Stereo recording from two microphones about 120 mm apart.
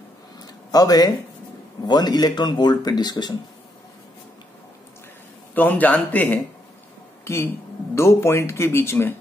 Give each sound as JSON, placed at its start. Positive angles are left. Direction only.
{"t": 0.4, "sound": "a sound", "side_deg": 30}
{"t": 1.9, "sound": "speech", "side_deg": 35}
{"t": 5.5, "sound": "speech", "side_deg": 15}